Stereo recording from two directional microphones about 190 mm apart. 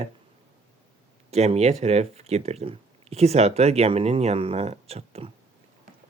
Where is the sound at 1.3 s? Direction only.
35° right (ahead or behind).